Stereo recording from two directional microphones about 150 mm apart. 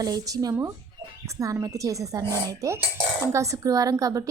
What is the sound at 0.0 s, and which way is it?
Speech, 25° right (ahead or behind).